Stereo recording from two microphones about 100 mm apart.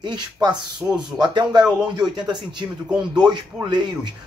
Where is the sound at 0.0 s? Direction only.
45° right (ahead or behind).